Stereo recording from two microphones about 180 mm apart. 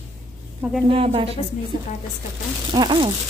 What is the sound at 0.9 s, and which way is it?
Speech, 30° right (ahead or behind).